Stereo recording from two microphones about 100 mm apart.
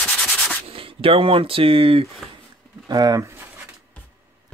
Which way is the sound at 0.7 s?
65° right (ahead or behind).